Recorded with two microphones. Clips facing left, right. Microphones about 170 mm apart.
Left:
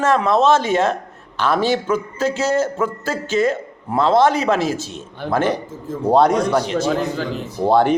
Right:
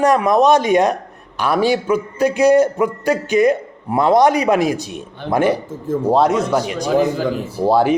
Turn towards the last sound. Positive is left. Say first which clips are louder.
# right 1 dB
turn(degrees=-5)  # may be behind; listen again after turning